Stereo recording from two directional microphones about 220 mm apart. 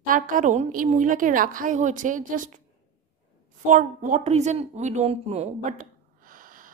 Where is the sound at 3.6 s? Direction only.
35° right (ahead or behind).